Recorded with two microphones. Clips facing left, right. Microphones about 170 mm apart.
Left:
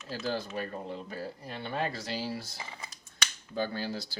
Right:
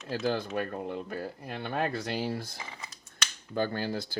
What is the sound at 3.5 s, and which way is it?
Speech, 55° right (ahead or behind).